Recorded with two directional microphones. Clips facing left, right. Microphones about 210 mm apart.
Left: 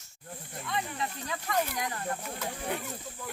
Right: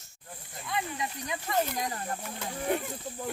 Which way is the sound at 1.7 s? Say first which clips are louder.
Right 1 dB; 30° right (ahead or behind).